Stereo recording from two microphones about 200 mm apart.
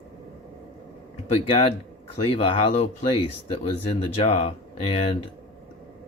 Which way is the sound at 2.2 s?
25° left (ahead or behind).